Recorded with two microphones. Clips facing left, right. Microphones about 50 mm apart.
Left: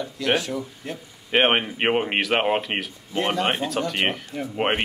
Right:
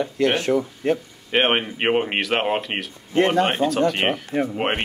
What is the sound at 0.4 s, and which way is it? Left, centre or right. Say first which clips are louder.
Speech: right 8 dB; right.